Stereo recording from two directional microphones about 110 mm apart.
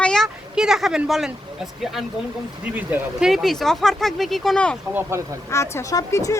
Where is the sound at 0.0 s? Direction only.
5° left (ahead or behind).